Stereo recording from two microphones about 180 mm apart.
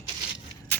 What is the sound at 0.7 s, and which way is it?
Vehicle, 10° left (ahead or behind).